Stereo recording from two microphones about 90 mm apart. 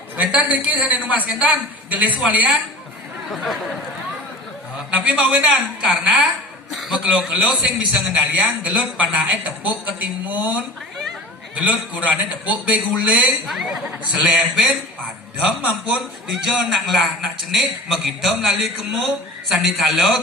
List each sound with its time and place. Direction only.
0.2 s a man's voice: 10° right (ahead or behind)
3.3 s a man's voice: centre (ahead or behind)
4.9 s a man's voice: 10° right (ahead or behind)